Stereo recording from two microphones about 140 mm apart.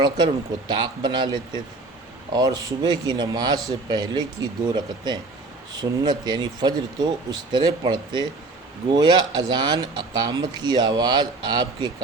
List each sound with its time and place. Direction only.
0.7 s speech: 30° right (ahead or behind)